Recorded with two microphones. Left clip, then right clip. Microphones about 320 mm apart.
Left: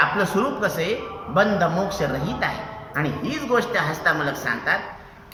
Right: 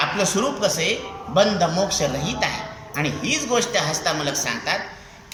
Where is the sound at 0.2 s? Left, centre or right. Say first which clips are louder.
Right 1 dB; centre.